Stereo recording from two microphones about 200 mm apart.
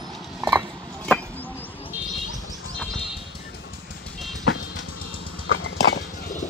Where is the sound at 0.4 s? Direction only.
10° right (ahead or behind).